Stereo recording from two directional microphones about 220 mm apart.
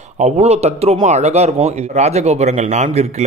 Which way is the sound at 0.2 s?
30° right (ahead or behind).